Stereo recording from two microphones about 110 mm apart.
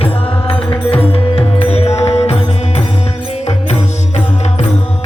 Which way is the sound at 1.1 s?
60° left (ahead or behind).